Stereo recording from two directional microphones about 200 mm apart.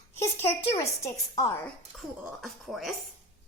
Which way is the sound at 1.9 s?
Centre (ahead or behind).